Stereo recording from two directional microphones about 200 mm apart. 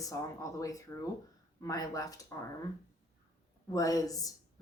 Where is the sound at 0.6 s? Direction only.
15° left (ahead or behind).